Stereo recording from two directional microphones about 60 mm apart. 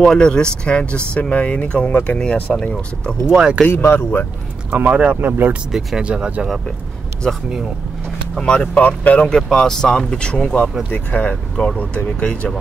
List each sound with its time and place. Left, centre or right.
0.0 s speech: centre
3.3 s speech: centre
3.6 s speech: left
4.6 s speech: right
5.7 s speech: centre
6.0 s speech: centre
8.4 s speech: centre
8.7 s speech: left
9.6 s speech: centre